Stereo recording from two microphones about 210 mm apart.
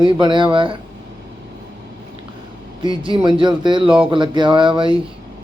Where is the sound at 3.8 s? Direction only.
5° right (ahead or behind).